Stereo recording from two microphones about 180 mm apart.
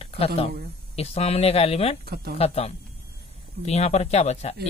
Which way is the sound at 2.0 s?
60° right (ahead or behind).